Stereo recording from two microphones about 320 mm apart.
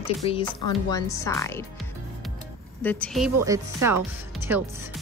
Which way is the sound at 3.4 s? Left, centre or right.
Centre.